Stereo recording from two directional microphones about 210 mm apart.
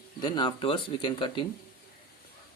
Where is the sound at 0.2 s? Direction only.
20° left (ahead or behind).